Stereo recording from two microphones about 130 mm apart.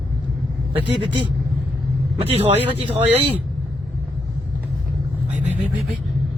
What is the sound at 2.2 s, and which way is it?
Speech, 50° right (ahead or behind).